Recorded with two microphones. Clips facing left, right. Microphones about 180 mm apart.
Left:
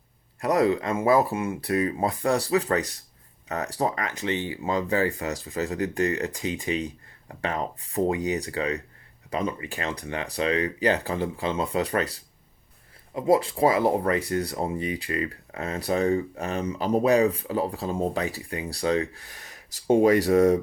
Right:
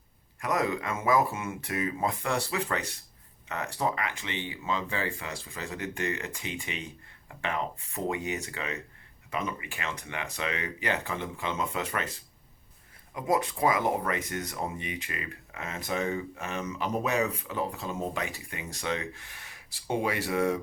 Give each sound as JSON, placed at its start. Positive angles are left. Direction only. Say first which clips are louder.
{"t": 0.3, "sound": "speech", "louder": "left 7 dB", "side_deg": 35}